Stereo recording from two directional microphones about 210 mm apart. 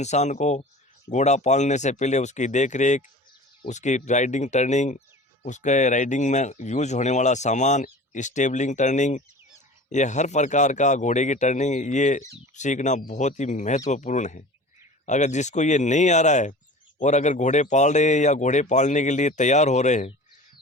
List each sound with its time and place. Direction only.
0.0 s speech: 35° left (ahead or behind)